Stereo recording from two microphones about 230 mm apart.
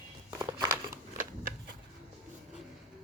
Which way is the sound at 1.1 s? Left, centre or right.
Right.